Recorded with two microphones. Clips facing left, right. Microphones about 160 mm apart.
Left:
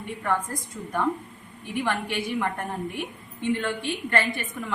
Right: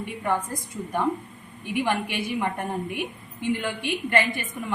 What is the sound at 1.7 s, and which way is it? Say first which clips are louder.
A woman's voice: right 2 dB; 15° right (ahead or behind).